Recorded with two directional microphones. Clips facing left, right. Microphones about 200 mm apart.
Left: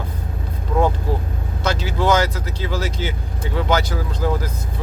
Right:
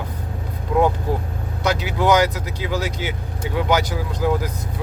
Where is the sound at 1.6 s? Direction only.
15° right (ahead or behind).